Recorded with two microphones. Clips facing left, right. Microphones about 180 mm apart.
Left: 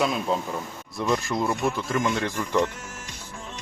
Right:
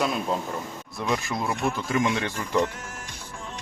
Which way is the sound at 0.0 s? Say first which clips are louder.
Left 1 dB; centre (ahead or behind).